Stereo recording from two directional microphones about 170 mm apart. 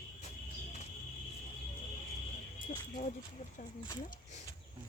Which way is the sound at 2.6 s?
50° left (ahead or behind).